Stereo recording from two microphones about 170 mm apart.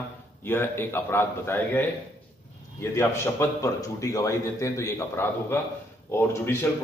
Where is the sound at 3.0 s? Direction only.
15° left (ahead or behind).